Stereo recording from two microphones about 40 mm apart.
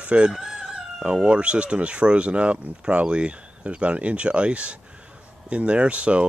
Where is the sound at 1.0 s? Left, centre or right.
Right.